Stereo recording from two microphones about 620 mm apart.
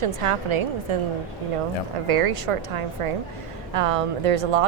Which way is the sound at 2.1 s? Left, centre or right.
Right.